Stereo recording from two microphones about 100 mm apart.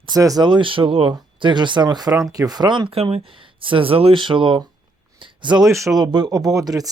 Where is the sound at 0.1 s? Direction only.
40° right (ahead or behind).